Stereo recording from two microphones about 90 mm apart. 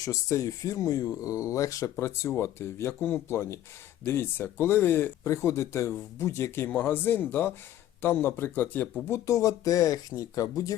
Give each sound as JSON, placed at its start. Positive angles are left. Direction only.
{"t": 0.0, "sound": "speech", "side_deg": 35}
{"t": 5.2, "sound": "speech", "side_deg": 35}
{"t": 9.0, "sound": "speech", "side_deg": 30}